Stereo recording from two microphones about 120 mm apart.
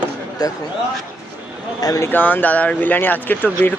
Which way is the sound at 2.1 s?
15° left (ahead or behind).